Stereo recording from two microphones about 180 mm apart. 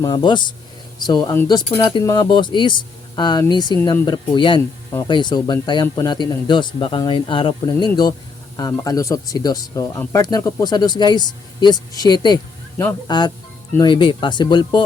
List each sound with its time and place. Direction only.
0.0 s speech: 25° left (ahead or behind)